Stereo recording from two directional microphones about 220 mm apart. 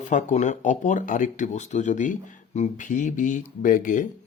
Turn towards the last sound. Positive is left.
turn(degrees=35)  # may be behind; listen again after turning